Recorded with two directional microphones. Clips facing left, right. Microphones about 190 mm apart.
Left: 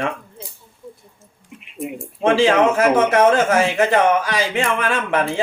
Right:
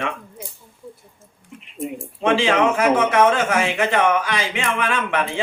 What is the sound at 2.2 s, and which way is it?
A man's voice, 40° left (ahead or behind).